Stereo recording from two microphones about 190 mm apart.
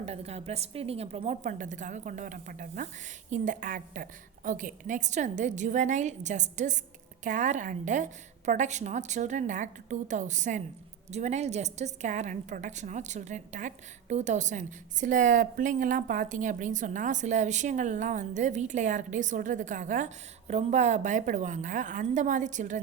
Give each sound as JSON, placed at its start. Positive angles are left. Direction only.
{"t": 0.0, "sound": "a woman's voice", "side_deg": -35}